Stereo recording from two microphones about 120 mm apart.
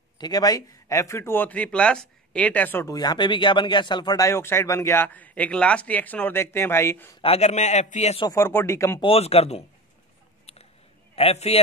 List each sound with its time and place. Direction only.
0.2 s speech: 35° left (ahead or behind); by 2.9 s 15° left (ahead or behind)
2.9 s speech: 35° left (ahead or behind)
4.3 s speech: 20° left (ahead or behind)
7.2 s a man's voice: 60° left (ahead or behind)
8.3 s speech: 20° left (ahead or behind)
9.0 s speech: 55° left (ahead or behind)
11.1 s speech: 60° left (ahead or behind)